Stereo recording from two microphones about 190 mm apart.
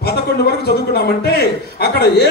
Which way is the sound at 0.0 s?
55° left (ahead or behind).